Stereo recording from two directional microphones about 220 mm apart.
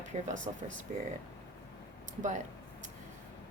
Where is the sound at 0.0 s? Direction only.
35° right (ahead or behind).